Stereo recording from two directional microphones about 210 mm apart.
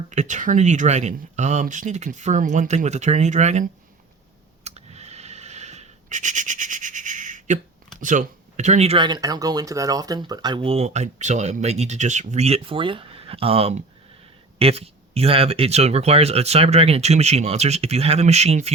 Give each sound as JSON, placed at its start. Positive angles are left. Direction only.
{"t": 0.1, "sound": "speech", "side_deg": -35}
{"t": 4.6, "sound": "writing", "side_deg": -30}
{"t": 7.9, "sound": "speech", "side_deg": -35}